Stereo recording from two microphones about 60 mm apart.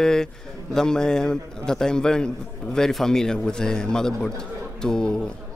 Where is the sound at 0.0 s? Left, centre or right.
Centre.